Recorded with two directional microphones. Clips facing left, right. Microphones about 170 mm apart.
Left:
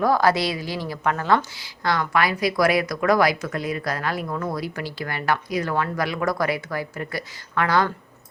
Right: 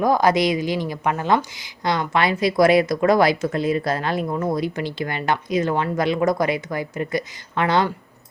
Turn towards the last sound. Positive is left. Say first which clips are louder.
# right 2 dB
turn(degrees=-20)  # may be behind; listen again after turning